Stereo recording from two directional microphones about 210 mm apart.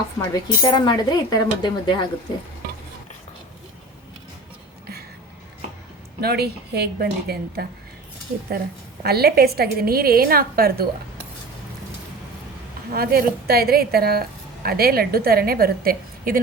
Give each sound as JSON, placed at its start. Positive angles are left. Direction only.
{"t": 0.2, "sound": "speech", "side_deg": 20}
{"t": 6.1, "sound": "a woman's voice", "side_deg": -50}
{"t": 9.0, "sound": "a woman's voice", "side_deg": -50}
{"t": 12.9, "sound": "a woman's voice", "side_deg": -45}